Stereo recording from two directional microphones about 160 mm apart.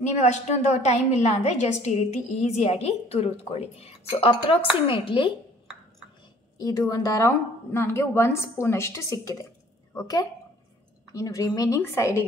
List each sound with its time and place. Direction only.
0.0 s a woman's voice: 45° left (ahead or behind)
6.6 s a woman's voice: 20° left (ahead or behind)